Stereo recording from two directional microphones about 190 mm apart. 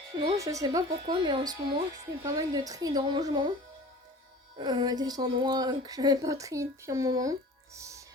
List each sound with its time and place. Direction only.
0.3 s a woman's voice: 15° right (ahead or behind)
4.5 s a woman's voice: 20° right (ahead or behind)
7.8 s music: 15° right (ahead or behind)